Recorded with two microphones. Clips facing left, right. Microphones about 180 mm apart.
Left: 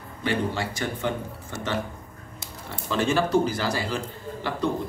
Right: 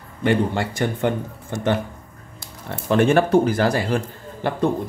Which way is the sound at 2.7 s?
60° right (ahead or behind).